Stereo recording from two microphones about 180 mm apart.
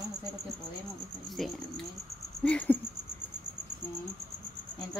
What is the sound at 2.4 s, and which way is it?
Cricket, 10° left (ahead or behind).